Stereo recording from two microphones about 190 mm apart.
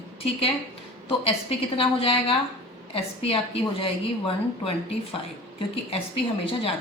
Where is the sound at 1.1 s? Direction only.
30° left (ahead or behind).